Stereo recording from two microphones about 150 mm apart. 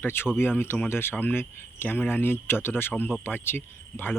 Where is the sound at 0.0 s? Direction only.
15° left (ahead or behind).